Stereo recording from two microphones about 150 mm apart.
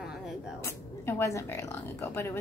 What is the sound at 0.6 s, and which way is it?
Speech, 15° left (ahead or behind).